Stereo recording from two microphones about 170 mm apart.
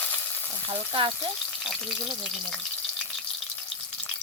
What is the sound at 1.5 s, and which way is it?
Frying, centre (ahead or behind).